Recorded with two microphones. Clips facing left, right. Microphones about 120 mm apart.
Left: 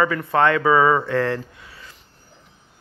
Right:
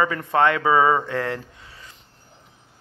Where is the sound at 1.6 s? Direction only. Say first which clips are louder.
Left 2 dB; 25° right (ahead or behind).